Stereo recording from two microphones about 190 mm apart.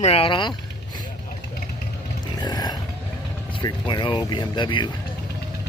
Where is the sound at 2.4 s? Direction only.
20° left (ahead or behind).